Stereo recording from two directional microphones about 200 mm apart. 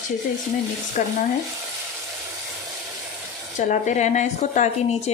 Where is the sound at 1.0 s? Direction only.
40° left (ahead or behind).